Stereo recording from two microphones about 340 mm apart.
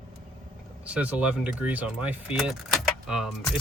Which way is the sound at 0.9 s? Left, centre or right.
Centre.